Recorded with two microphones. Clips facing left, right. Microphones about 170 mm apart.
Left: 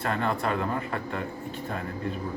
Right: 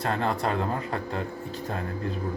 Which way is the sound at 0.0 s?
35° right (ahead or behind).